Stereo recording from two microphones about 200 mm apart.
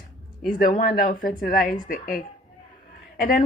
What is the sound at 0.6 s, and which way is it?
A woman's voice, 45° left (ahead or behind).